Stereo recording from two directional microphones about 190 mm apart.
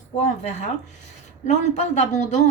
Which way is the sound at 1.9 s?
40° left (ahead or behind).